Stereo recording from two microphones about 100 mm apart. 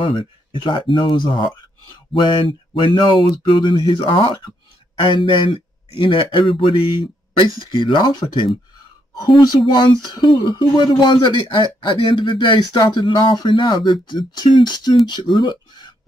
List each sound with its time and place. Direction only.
0.0 s speech: 50° left (ahead or behind)